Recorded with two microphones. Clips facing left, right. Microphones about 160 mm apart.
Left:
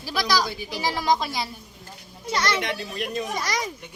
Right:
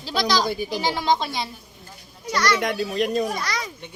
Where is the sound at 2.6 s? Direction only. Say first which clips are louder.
Right 7 dB; 45° right (ahead or behind).